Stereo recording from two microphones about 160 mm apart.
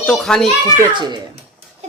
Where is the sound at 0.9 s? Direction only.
30° right (ahead or behind).